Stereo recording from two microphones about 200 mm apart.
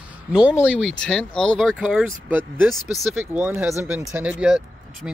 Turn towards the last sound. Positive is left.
turn(degrees=-5)  # may be behind; listen again after turning